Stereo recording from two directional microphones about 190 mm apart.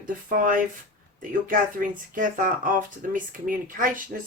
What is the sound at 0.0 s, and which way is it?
Speech, 45° right (ahead or behind).